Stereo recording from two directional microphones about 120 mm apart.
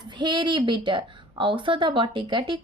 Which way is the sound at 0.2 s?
40° right (ahead or behind).